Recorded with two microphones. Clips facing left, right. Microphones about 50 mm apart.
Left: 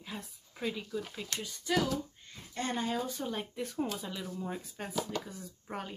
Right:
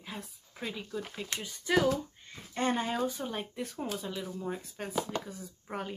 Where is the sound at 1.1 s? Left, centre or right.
Right.